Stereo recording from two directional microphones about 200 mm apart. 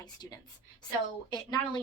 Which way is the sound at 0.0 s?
20° left (ahead or behind).